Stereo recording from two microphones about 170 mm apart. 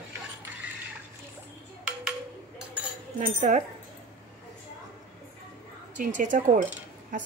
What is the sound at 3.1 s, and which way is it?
Speech, 50° right (ahead or behind).